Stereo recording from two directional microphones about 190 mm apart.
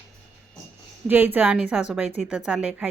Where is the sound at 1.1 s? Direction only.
10° right (ahead or behind).